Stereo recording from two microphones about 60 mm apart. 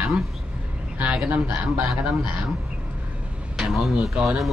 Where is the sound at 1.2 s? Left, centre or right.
Right.